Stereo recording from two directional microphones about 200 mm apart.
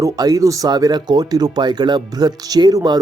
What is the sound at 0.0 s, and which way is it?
Speech, 20° right (ahead or behind).